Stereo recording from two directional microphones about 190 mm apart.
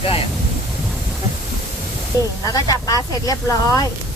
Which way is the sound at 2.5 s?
20° left (ahead or behind).